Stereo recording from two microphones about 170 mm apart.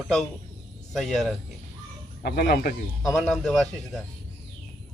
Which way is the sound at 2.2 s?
65° left (ahead or behind).